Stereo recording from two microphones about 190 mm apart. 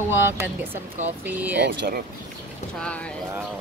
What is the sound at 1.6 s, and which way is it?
Speech, 65° right (ahead or behind).